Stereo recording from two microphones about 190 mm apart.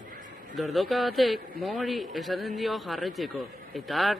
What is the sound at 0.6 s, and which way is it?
A man's voice, centre (ahead or behind).